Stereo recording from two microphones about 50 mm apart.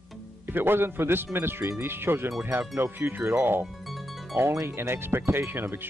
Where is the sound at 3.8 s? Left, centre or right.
Centre.